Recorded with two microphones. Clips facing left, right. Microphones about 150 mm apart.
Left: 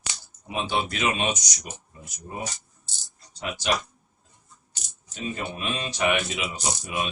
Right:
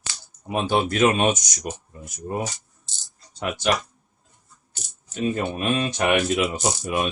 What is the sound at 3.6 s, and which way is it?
Speech, 55° right (ahead or behind).